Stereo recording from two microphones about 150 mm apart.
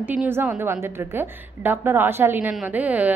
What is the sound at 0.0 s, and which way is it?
A woman's voice, 10° right (ahead or behind).